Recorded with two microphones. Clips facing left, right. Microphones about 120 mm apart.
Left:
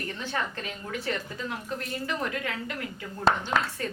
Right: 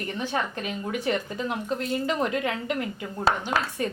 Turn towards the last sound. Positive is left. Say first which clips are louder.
# right 2 dB
turn(degrees=-20)  # may be behind; listen again after turning